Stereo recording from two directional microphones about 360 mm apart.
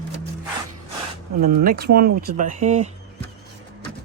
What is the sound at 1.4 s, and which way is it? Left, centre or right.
Speech, right.